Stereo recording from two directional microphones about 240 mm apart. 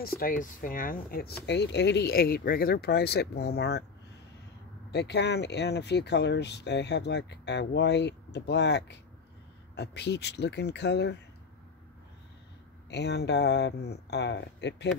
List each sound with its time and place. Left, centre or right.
0.0 s speech: left
4.9 s speech: left
12.9 s speech: left